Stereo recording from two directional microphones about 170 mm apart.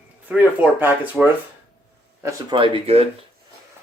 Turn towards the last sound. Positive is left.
turn(degrees=-35)  # may be behind; listen again after turning